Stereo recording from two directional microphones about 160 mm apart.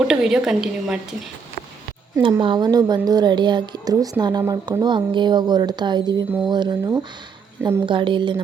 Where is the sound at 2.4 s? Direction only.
30° right (ahead or behind).